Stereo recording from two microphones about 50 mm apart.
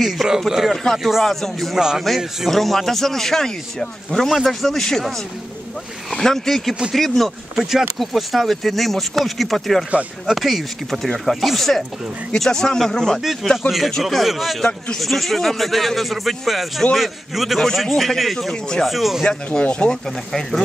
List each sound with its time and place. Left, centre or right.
0.0 s speech: centre
1.8 s a man's voice: centre
2.0 s speech: centre
4.3 s speech: centre
6.1 s speech: centre
13.2 s speech: centre
14.6 s speech: centre
15.0 s speech: centre
18.5 s speech: centre
18.9 s speech: centre
19.2 s speech: left